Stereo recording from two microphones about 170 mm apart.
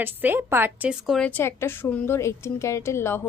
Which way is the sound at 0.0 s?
10° right (ahead or behind).